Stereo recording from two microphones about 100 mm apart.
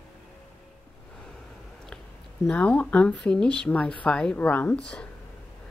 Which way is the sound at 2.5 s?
10° left (ahead or behind).